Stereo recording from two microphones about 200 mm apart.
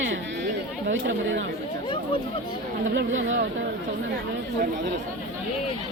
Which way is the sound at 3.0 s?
70° right (ahead or behind).